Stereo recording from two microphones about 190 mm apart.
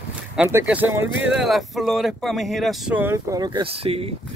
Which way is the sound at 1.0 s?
80° right.